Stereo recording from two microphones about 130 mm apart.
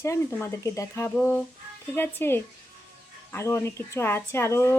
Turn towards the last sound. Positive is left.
turn(degrees=20)  # may be behind; listen again after turning